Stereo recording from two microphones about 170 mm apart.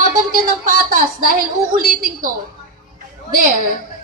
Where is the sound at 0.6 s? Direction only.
55° right (ahead or behind).